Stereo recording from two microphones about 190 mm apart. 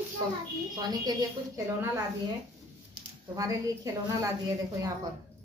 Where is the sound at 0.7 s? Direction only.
20° right (ahead or behind).